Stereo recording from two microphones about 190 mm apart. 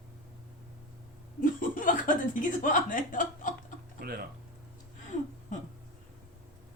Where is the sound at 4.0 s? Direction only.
50° right (ahead or behind).